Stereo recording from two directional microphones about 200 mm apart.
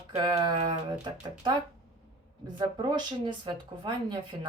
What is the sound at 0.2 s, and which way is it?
Speech, 20° right (ahead or behind).